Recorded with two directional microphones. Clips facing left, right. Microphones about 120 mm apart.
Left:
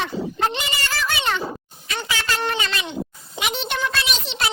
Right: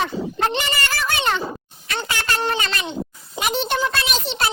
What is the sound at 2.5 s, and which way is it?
A child's voice, 40° right (ahead or behind).